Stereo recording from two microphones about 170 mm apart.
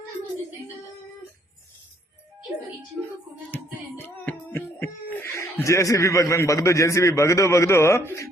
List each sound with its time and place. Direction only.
3.5 s music: 10° left (ahead or behind)